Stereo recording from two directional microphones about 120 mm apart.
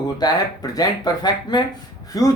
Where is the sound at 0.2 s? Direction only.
35° left (ahead or behind).